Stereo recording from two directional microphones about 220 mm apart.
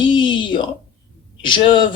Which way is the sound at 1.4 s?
20° left (ahead or behind).